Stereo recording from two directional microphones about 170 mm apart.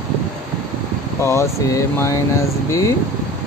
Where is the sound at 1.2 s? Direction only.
15° left (ahead or behind).